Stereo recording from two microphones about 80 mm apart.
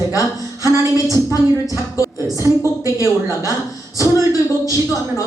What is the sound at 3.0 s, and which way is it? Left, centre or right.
Speech, right.